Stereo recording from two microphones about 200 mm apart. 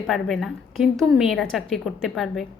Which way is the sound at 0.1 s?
Centre (ahead or behind).